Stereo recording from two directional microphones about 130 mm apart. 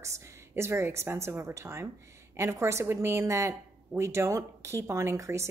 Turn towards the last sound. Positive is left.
turn(degrees=-20)  # may be behind; listen again after turning